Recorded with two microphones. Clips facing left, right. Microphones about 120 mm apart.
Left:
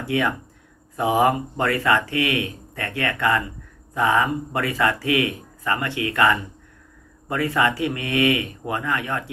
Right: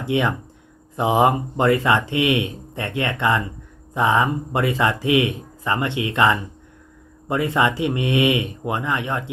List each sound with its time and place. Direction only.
0.0 s speech: 25° right (ahead or behind)